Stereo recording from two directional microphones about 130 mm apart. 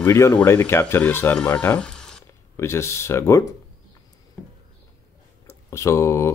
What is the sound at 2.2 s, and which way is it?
Speech, 20° left (ahead or behind).